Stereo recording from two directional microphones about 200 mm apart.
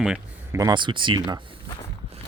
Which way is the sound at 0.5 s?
20° right (ahead or behind).